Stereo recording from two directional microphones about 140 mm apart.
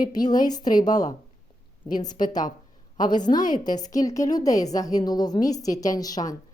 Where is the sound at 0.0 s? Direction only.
30° left (ahead or behind).